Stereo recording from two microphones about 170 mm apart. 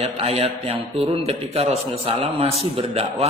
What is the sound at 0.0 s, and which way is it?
A man's voice, 35° right (ahead or behind).